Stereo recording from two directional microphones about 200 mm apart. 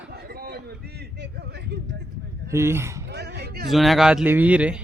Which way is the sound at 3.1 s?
55° right (ahead or behind).